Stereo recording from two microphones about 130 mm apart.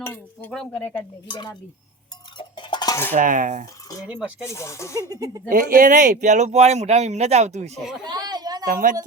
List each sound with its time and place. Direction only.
0.0 s chink: 15° left (ahead or behind)
0.5 s speech: 10° left (ahead or behind)
1.3 s a sound: 35° left (ahead or behind)
3.1 s cutlery: 85° right
4.4 s speech: 20° left (ahead or behind)
4.9 s speech: 30° right (ahead or behind)
5.5 s speech: 90° right; by 7.7 s 60° right (ahead or behind)
8.0 s a sound: 30° right (ahead or behind)
8.6 s a woman's voice: 90° right